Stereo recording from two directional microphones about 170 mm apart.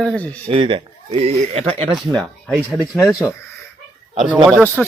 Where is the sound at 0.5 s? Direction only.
30° right (ahead or behind).